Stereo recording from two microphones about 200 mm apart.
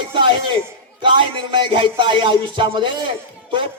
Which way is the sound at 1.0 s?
25° right (ahead or behind).